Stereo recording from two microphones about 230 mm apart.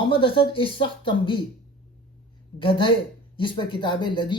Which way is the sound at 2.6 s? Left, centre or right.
Left.